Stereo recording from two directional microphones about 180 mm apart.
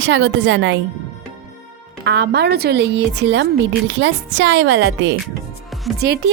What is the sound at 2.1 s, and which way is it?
A woman's voice, 70° right (ahead or behind).